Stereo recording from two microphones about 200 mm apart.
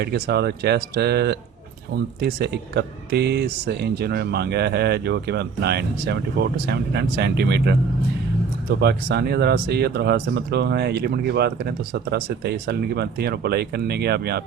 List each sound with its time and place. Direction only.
0.0 s speech: 55° right (ahead or behind)